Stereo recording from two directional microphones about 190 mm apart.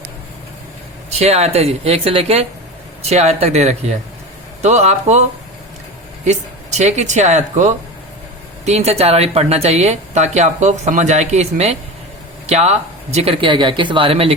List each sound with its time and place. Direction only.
1.1 s speech: 35° right (ahead or behind)
6.2 s speech: 35° right (ahead or behind)